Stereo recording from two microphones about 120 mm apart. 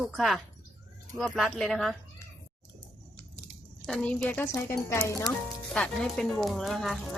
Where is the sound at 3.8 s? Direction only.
5° left (ahead or behind).